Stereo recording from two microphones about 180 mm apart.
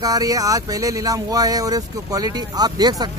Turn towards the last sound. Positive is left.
turn(degrees=-20)  # may be behind; listen again after turning